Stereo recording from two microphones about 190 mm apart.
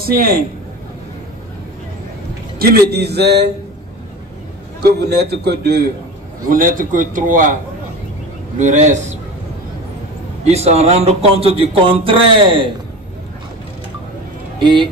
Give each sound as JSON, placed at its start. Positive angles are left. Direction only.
{"t": 0.0, "sound": "a man's voice", "side_deg": -50}
{"t": 2.6, "sound": "a man's voice", "side_deg": -55}
{"t": 4.8, "sound": "a man's voice", "side_deg": -60}
{"t": 6.5, "sound": "a man's voice", "side_deg": -45}
{"t": 8.5, "sound": "speech", "side_deg": -40}
{"t": 10.4, "sound": "speech", "side_deg": -35}
{"t": 14.6, "sound": "speech", "side_deg": -25}